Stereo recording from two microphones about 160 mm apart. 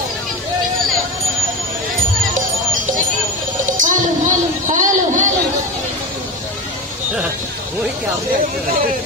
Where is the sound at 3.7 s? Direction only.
55° right (ahead or behind).